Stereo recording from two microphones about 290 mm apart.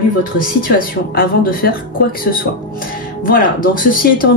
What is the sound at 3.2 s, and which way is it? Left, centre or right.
Speech, left.